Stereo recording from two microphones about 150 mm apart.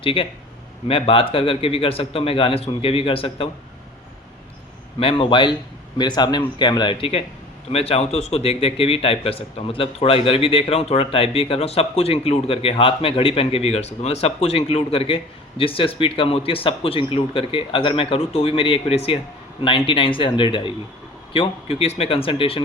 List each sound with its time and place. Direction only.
0.0 s speech: 35° left (ahead or behind)
4.9 s a man's voice: 35° left (ahead or behind)